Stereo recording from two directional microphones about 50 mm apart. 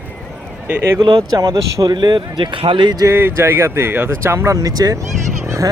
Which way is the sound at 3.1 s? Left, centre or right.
Right.